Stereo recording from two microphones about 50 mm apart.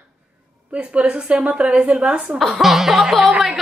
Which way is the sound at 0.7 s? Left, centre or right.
Right.